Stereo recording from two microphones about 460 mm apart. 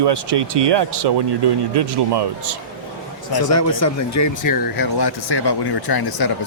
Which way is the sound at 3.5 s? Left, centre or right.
Left.